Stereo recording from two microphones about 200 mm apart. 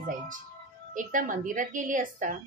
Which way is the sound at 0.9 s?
40° right (ahead or behind).